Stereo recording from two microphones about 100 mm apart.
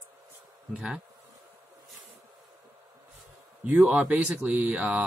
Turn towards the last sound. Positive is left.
turn(degrees=-15)  # may be behind; listen again after turning